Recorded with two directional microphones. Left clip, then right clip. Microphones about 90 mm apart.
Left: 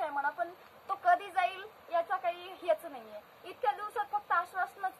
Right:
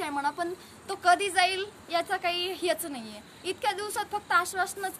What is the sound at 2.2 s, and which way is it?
Speech, 20° left (ahead or behind).